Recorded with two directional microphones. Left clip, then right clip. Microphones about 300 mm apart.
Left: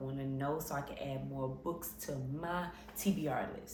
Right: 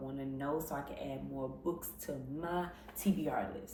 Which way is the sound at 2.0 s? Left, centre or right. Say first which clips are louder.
Even; centre.